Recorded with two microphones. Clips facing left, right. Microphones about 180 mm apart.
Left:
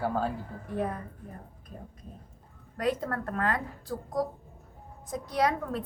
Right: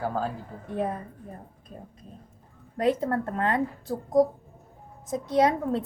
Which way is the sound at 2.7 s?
25° right (ahead or behind).